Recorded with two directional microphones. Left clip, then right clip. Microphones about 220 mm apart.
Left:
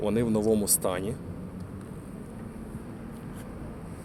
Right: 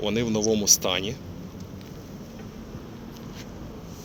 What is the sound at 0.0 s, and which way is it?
Speech, 5° left (ahead or behind).